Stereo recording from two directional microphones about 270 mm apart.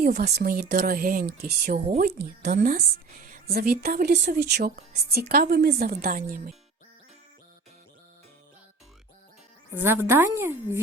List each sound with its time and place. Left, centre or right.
0.0 s a woman's voice: right
9.7 s a woman's voice: centre